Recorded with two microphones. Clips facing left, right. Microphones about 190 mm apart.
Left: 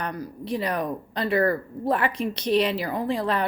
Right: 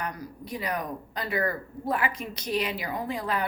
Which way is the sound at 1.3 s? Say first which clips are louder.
Left 7 dB; 35° left (ahead or behind).